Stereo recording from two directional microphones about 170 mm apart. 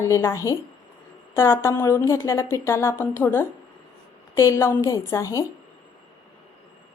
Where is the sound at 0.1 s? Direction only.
15° left (ahead or behind).